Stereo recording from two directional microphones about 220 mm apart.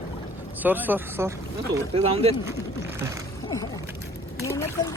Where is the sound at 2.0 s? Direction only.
25° right (ahead or behind).